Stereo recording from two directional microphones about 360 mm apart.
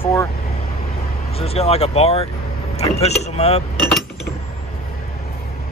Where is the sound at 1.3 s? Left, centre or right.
Centre.